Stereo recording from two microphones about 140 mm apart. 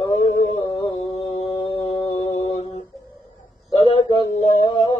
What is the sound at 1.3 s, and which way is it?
Mantra, 50° left (ahead or behind).